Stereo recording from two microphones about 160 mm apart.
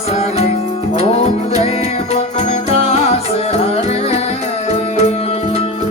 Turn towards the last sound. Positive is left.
turn(degrees=40)  # may be behind; listen again after turning